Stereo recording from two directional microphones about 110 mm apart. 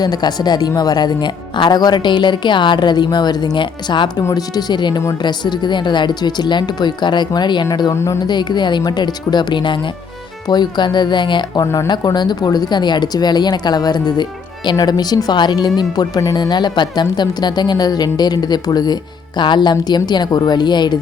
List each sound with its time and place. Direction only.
0.0 s speech: 40° left (ahead or behind)
4.3 s speech: 35° left (ahead or behind)
7.9 s speech: 25° left (ahead or behind)
8.3 s speech: 40° left (ahead or behind)
11.6 s speech: 30° left (ahead or behind)